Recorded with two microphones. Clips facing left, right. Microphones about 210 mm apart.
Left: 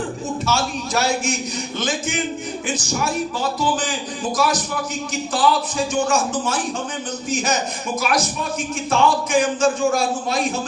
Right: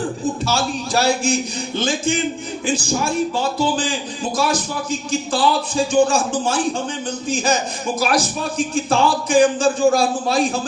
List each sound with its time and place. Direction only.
0.4 s a man's voice: 35° right (ahead or behind)
7.9 s a man's voice: 30° right (ahead or behind)